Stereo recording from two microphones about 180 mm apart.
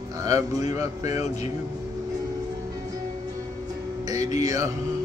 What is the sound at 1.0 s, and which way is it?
Speech, 35° left (ahead or behind).